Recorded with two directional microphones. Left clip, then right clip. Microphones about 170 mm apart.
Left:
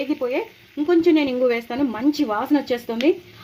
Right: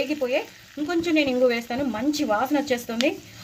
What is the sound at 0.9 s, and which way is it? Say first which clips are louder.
A woman's voice: left 5 dB; 25° left (ahead or behind).